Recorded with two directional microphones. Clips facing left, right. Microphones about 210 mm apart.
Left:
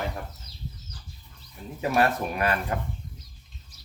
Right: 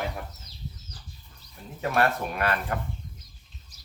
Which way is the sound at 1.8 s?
15° left (ahead or behind).